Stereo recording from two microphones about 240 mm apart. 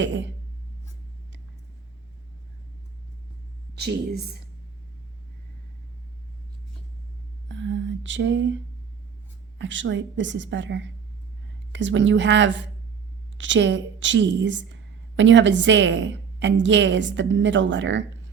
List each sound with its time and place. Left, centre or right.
0.0 s a woman's voice: right
3.8 s a woman's voice: right
7.4 s a sound: right
9.6 s a woman's voice: right